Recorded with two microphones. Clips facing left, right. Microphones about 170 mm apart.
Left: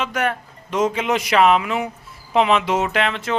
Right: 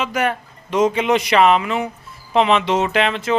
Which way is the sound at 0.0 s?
Centre (ahead or behind).